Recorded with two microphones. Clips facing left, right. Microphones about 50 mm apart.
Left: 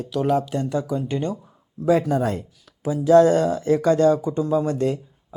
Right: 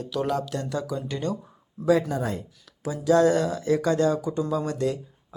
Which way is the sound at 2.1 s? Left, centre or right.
Left.